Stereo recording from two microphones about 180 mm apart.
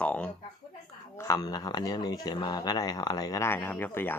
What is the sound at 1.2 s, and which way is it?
Speech, 20° left (ahead or behind).